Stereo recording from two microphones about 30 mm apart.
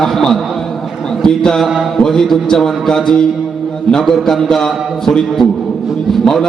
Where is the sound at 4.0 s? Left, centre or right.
Centre.